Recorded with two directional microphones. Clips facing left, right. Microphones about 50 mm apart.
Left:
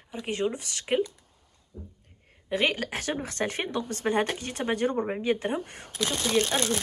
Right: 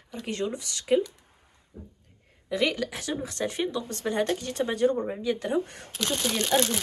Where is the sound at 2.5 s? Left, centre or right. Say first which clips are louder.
Even; left.